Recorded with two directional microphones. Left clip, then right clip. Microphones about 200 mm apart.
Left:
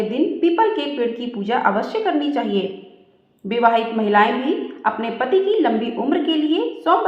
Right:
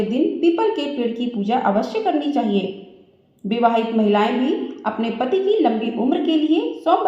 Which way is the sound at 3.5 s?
25° left (ahead or behind).